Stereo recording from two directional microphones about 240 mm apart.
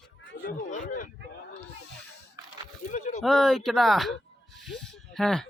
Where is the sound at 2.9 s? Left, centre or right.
Left.